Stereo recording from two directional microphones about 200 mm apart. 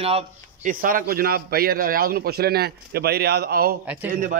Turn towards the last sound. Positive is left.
turn(degrees=-40)  # may be behind; listen again after turning